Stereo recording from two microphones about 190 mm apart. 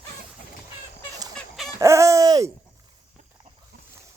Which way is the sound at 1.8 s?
15° right (ahead or behind).